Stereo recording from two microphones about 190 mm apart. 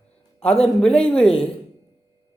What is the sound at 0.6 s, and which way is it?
Speech, 5° left (ahead or behind).